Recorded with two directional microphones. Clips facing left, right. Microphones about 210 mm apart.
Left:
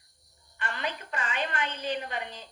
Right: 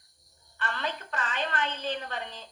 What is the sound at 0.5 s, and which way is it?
A woman's voice, 15° left (ahead or behind).